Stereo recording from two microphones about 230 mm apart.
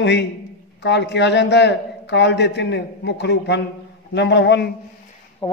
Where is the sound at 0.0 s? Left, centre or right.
Left.